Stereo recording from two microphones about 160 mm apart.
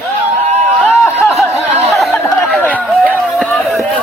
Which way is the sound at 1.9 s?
5° left (ahead or behind).